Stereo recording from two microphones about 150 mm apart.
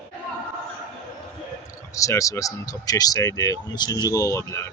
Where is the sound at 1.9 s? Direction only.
20° left (ahead or behind).